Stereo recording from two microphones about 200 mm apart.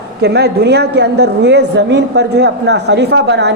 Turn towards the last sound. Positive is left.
turn(degrees=-60)  # may be behind; listen again after turning